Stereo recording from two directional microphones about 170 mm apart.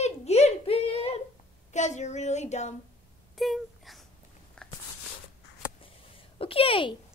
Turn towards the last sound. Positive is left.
turn(degrees=35)  # may be behind; listen again after turning